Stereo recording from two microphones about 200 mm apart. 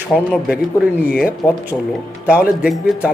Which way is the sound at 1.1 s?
45° left (ahead or behind).